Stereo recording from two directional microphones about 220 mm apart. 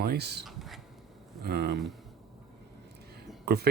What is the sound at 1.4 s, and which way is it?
Speech, 50° right (ahead or behind).